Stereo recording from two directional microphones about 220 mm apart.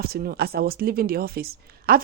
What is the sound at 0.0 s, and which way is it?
A woman's voice, 45° right (ahead or behind).